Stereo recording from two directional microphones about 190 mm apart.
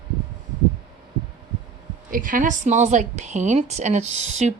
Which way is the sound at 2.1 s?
45° right (ahead or behind).